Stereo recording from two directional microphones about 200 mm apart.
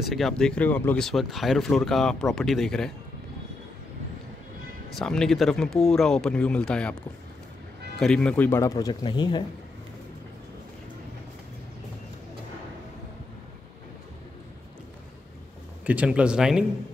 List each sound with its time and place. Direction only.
0.0 s speech: centre (ahead or behind)
4.9 s speech: 5° left (ahead or behind)
8.0 s speech: 5° left (ahead or behind); by 9.4 s 20° left (ahead or behind)
15.8 s speech: 5° right (ahead or behind)